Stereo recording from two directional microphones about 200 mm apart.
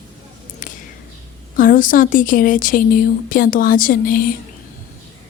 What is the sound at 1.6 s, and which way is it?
Speech, 40° left (ahead or behind).